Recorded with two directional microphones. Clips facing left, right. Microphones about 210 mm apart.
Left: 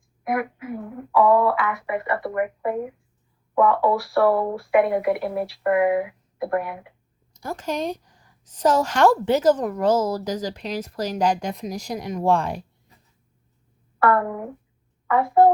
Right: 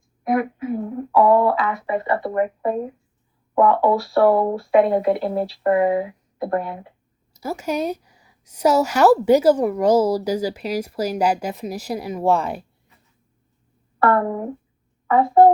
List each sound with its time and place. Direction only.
0.3 s a sound: 25° right (ahead or behind)
1.3 s speech: 25° right (ahead or behind)
7.3 s a woman's voice: 5° right (ahead or behind)
14.0 s speech: 25° right (ahead or behind)